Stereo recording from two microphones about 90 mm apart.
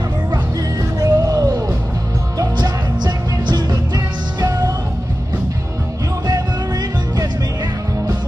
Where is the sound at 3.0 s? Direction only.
55° right (ahead or behind).